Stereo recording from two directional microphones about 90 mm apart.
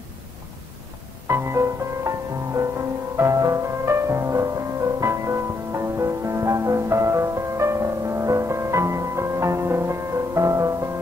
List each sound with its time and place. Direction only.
1.2 s music: 30° right (ahead or behind)